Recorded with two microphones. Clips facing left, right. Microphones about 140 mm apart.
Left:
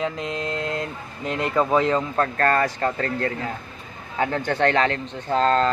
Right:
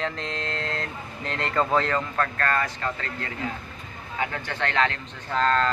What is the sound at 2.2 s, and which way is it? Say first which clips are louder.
Speech: left 7 dB; 35° left (ahead or behind).